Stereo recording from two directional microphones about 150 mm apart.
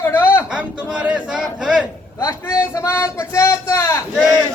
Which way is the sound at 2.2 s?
20° left (ahead or behind).